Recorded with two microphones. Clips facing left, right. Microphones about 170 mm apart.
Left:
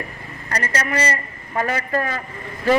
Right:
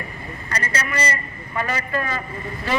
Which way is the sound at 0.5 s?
45° left (ahead or behind).